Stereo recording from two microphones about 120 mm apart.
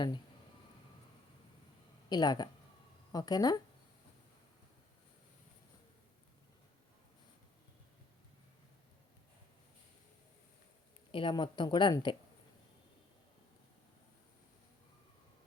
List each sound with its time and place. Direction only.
2.0 s speech: 35° left (ahead or behind)
11.1 s speech: 45° left (ahead or behind)